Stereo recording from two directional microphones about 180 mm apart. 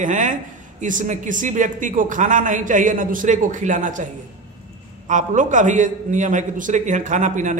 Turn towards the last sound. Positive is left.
turn(degrees=-45)  # may be behind; listen again after turning